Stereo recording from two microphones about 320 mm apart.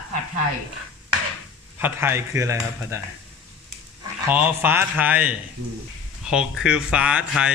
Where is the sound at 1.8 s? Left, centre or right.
Centre.